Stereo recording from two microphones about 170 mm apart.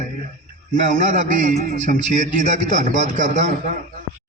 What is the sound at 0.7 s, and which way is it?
A man's voice, 45° right (ahead or behind).